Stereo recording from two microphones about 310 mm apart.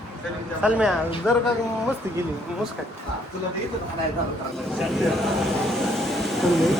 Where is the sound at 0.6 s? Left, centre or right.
Centre.